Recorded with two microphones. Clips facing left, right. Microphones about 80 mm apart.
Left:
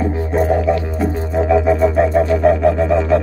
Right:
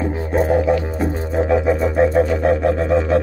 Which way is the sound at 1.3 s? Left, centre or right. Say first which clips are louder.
Left 3 dB; centre.